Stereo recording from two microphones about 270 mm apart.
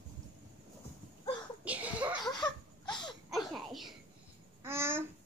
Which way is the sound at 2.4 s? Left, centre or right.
Centre.